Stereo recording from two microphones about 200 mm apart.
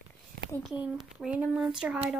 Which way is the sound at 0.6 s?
5° right (ahead or behind).